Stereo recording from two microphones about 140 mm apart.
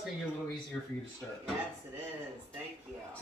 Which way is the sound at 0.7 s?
10° left (ahead or behind).